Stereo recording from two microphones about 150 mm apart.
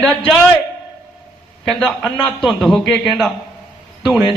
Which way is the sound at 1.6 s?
Centre (ahead or behind).